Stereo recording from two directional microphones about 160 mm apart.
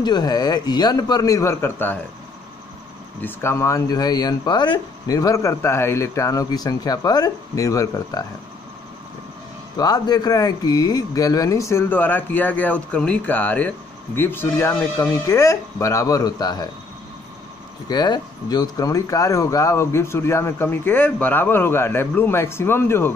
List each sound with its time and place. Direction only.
0.0 s speech: 25° left (ahead or behind)
3.2 s speech: 15° left (ahead or behind)
9.8 s speech: 25° left (ahead or behind)
17.8 s speech: 25° left (ahead or behind)